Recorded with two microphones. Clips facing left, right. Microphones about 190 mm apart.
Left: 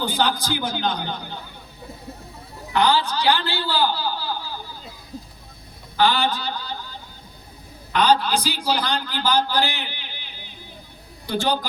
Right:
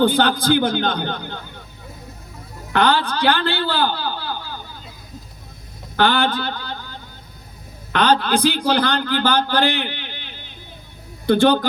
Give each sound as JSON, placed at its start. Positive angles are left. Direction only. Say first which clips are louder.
{"t": 0.0, "sound": "a man's voice", "louder": "right 7 dB", "side_deg": -55}
{"t": 2.7, "sound": "a man's voice", "louder": "right 2 dB", "side_deg": -55}
{"t": 6.0, "sound": "a sound", "louder": "right 2 dB", "side_deg": -55}
{"t": 7.9, "sound": "a man's voice", "louder": "right 2 dB", "side_deg": -60}
{"t": 11.3, "sound": "a man's voice", "louder": "right 9 dB", "side_deg": -55}